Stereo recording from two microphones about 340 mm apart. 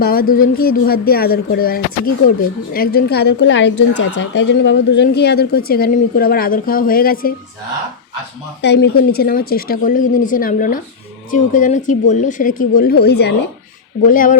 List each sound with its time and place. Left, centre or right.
0.0 s speech: left
8.6 s speech: left